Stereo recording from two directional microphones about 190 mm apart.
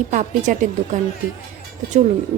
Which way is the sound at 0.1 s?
40° right (ahead or behind).